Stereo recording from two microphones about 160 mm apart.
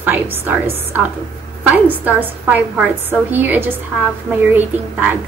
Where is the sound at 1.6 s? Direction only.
10° right (ahead or behind).